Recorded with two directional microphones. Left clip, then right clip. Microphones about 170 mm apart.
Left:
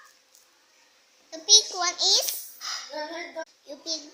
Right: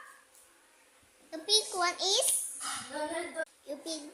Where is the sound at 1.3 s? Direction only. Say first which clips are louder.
Left 10 dB; 15° right (ahead or behind).